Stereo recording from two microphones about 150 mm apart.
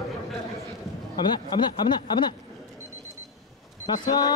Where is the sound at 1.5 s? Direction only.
30° left (ahead or behind).